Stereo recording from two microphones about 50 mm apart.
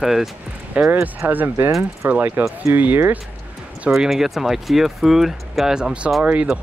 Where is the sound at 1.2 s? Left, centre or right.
Right.